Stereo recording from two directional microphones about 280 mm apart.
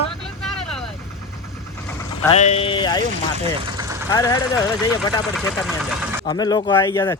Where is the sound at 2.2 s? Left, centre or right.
Left.